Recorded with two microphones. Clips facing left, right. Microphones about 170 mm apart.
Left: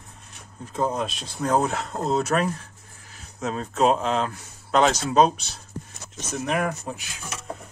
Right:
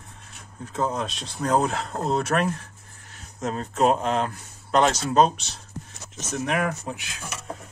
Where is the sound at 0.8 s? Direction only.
10° left (ahead or behind).